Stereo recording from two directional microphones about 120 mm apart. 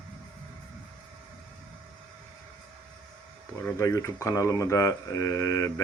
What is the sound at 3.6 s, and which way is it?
Speech, 20° left (ahead or behind).